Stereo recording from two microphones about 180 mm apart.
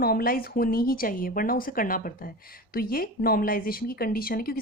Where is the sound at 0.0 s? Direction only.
55° left (ahead or behind).